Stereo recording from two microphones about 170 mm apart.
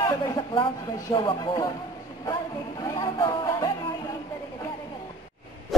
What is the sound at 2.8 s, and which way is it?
Music, 25° left (ahead or behind).